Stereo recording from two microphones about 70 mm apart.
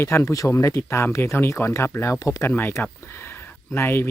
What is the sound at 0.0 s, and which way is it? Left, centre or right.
Speech, left.